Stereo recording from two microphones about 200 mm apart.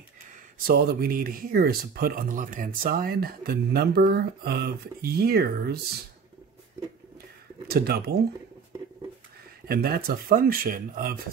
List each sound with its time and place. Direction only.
0.6 s speech: 45° right (ahead or behind)
7.6 s speech: 50° right (ahead or behind)
9.7 s speech: 50° right (ahead or behind)